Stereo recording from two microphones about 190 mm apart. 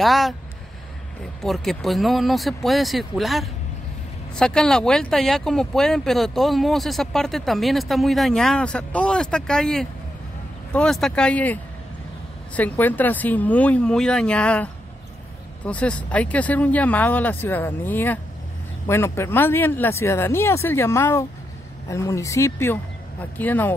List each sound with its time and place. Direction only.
0.0 s speech: centre (ahead or behind)
1.4 s speech: centre (ahead or behind)